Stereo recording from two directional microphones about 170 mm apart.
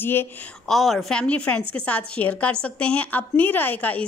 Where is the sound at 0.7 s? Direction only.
Centre (ahead or behind).